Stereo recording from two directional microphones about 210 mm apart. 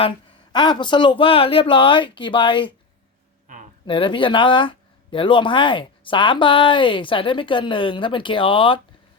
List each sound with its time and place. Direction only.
0.5 s speech: 20° left (ahead or behind)
3.4 s a sound: 35° right (ahead or behind)
3.8 s speech: 25° left (ahead or behind)